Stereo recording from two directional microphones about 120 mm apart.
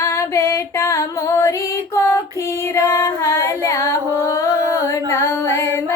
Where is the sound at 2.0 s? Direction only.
25° left (ahead or behind).